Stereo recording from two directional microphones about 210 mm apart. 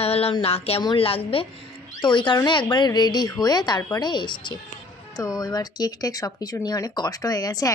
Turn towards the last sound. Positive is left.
turn(degrees=15)  # may be behind; listen again after turning